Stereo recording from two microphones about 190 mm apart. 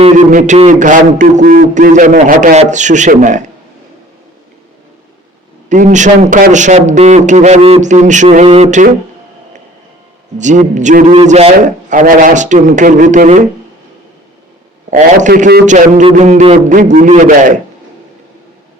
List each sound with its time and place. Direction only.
0.0 s a man's voice: 40° right (ahead or behind)
5.6 s a man's voice: 40° right (ahead or behind)
10.3 s a man's voice: 40° right (ahead or behind)
14.8 s a man's voice: 40° right (ahead or behind)